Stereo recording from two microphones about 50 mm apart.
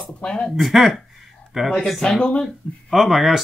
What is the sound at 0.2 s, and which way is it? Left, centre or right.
Speech, centre.